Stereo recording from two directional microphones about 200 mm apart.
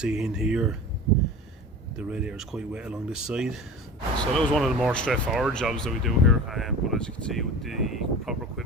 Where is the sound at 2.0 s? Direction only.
5° right (ahead or behind).